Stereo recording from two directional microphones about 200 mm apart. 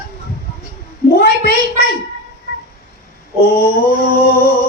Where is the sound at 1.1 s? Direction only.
50° left (ahead or behind).